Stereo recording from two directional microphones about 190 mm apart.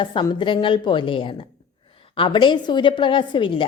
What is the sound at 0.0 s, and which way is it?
A woman's voice, 25° left (ahead or behind).